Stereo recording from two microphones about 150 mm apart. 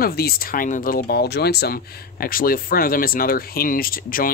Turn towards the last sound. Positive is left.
turn(degrees=70)  # may be behind; listen again after turning